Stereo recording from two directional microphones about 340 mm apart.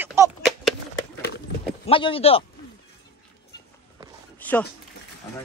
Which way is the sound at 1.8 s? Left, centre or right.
Centre.